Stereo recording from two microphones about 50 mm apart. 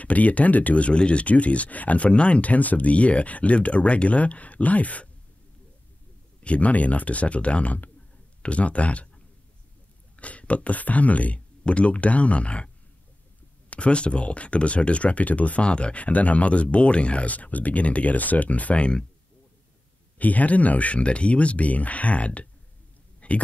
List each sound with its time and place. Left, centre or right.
0.0 s speech: left
6.4 s speech: left
20.2 s speech: left
23.2 s a sound: left